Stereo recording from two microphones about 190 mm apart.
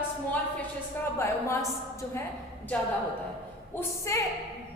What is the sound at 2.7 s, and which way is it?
A woman's voice, 5° left (ahead or behind).